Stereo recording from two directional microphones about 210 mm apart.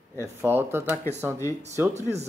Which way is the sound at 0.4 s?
10° right (ahead or behind).